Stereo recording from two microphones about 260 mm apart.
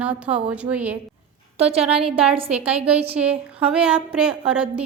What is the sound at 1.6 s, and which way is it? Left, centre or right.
Speech, right.